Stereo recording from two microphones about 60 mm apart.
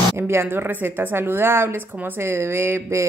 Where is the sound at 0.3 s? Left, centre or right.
Right.